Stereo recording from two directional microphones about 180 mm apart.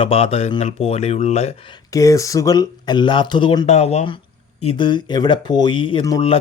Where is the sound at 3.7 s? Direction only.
40° left (ahead or behind).